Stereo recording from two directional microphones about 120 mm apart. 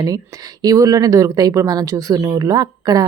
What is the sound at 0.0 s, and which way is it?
A woman's voice, 30° right (ahead or behind).